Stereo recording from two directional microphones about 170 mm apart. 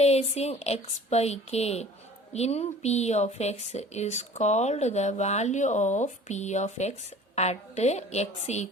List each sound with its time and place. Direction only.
0.0 s a woman's voice: 40° left (ahead or behind)